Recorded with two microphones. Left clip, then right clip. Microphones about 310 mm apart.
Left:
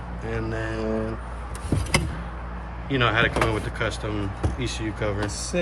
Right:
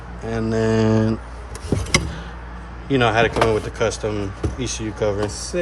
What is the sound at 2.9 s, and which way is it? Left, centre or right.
Speech, centre.